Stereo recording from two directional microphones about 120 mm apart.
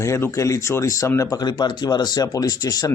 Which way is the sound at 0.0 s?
25° left (ahead or behind).